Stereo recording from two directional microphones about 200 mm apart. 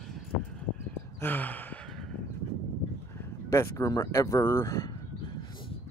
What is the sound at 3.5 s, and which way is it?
Speech, 15° left (ahead or behind).